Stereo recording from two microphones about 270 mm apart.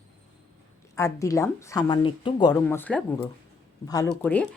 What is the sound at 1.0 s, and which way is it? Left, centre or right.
Speech, centre.